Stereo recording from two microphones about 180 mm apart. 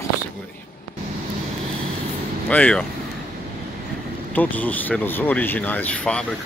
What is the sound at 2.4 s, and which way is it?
Speech, 5° left (ahead or behind).